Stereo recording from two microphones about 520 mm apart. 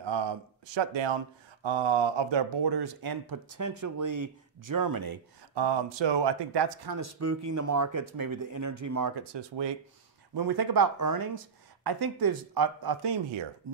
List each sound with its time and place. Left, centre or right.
0.0 s speech: right
7.0 s speech: right